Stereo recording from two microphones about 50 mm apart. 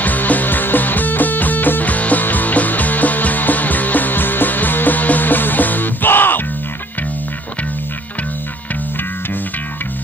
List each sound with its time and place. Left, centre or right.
0.0 s music: left